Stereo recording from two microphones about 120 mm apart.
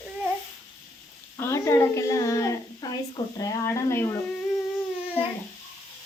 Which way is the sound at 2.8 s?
30° left (ahead or behind).